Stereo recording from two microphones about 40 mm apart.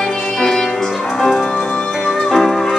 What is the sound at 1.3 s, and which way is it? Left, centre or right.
Music, left.